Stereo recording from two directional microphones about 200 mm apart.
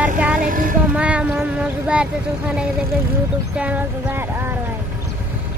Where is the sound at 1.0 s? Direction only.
5° right (ahead or behind).